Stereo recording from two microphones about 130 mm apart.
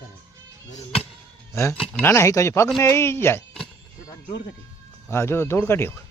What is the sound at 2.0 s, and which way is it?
Speech, 20° left (ahead or behind).